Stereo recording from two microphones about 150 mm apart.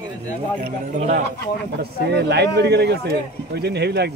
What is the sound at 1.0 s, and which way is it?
Speech, 55° right (ahead or behind).